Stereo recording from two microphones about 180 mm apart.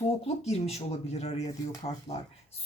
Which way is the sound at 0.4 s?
35° left (ahead or behind).